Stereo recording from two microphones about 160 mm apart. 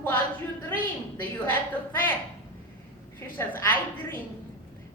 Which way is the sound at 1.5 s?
10° left (ahead or behind).